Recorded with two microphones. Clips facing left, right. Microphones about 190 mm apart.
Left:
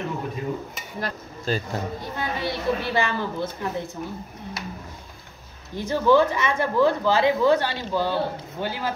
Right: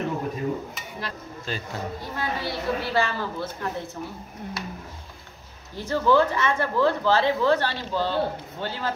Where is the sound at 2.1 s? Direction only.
20° left (ahead or behind).